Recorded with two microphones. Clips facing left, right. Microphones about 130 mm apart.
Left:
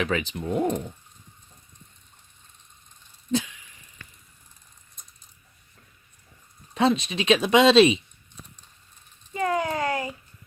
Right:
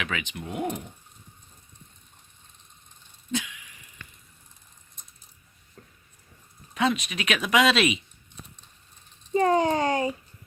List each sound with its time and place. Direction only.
0.0 s speech: 35° left (ahead or behind)
3.3 s a sound: 35° left (ahead or behind)
6.7 s speech: 30° left (ahead or behind)
9.3 s a child's voice: 30° right (ahead or behind)